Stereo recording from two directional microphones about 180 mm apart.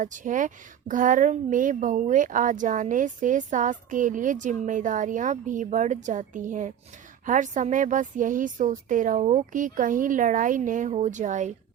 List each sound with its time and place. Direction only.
0.0 s a woman's voice: 45° right (ahead or behind)